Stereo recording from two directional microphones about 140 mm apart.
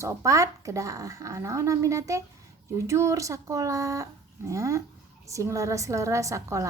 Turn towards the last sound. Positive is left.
turn(degrees=-20)  # may be behind; listen again after turning